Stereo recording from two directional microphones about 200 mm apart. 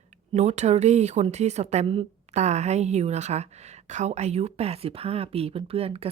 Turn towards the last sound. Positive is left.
turn(degrees=-30)  # may be behind; listen again after turning